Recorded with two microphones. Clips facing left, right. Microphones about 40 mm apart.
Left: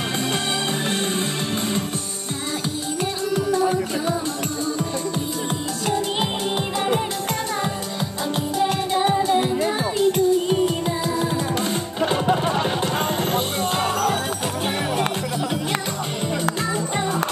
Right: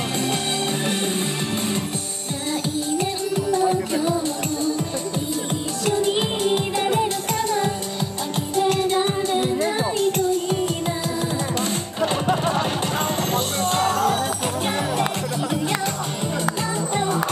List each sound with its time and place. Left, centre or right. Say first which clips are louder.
8.9 s music: left 2 dB; centre
9.6 s music: left 1 dB; left
12.0 s music: left 1 dB; centre